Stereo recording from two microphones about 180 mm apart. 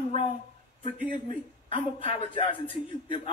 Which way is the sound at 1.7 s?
30° left (ahead or behind).